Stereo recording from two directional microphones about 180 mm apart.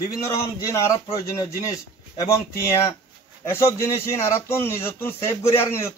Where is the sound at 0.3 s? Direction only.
15° left (ahead or behind).